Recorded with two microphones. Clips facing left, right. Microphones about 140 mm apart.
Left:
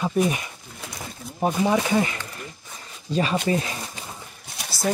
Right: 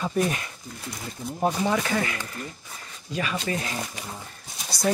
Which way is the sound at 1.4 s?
15° left (ahead or behind).